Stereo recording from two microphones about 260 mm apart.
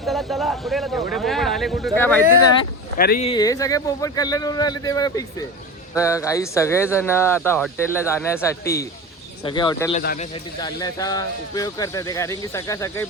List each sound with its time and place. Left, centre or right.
0.0 s speech: centre
3.2 s speech: centre
10.0 s a man's voice: left
10.3 s speech: centre